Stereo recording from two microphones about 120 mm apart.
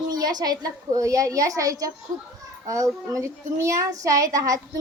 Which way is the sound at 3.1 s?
25° right (ahead or behind).